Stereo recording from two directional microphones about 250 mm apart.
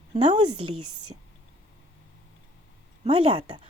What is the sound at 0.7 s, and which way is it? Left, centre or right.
Speech, right.